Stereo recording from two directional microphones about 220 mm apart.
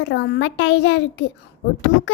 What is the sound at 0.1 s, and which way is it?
Child singing, 50° left (ahead or behind).